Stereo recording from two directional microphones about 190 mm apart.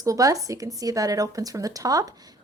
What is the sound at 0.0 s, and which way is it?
Speech, 20° right (ahead or behind).